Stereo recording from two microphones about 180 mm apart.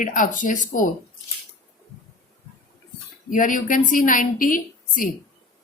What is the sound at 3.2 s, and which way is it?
A woman's voice, 45° left (ahead or behind).